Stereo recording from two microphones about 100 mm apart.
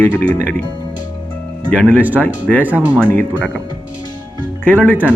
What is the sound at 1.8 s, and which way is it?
Speech, 15° right (ahead or behind).